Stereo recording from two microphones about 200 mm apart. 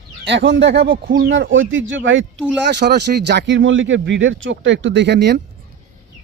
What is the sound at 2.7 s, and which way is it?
Speech, 55° right (ahead or behind).